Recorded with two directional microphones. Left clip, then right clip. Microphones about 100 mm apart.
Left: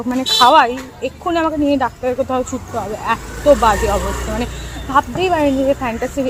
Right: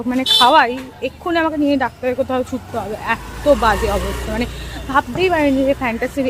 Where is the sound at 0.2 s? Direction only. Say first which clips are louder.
Left 1 dB; 20° right (ahead or behind).